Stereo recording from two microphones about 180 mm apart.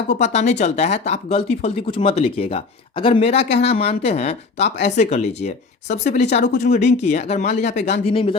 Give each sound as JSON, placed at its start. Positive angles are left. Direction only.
{"t": 0.2, "sound": "speech", "side_deg": 40}
{"t": 8.0, "sound": "speech", "side_deg": 30}